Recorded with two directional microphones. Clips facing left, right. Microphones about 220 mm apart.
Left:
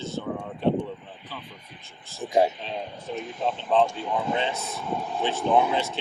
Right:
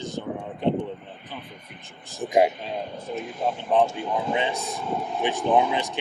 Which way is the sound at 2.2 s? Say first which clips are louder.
Right 2 dB; 15° right (ahead or behind).